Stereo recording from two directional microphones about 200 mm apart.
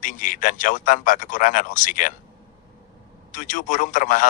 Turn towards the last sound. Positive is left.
turn(degrees=40)  # may be behind; listen again after turning